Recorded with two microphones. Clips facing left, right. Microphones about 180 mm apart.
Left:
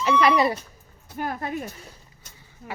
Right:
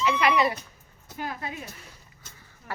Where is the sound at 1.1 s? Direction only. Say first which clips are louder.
Left 5 dB; 50° left (ahead or behind).